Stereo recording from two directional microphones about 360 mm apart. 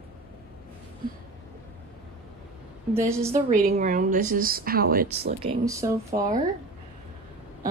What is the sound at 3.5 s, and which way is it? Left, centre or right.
A woman's voice, right.